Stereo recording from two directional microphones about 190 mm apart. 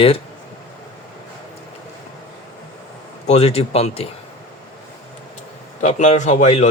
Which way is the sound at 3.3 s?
30° left (ahead or behind).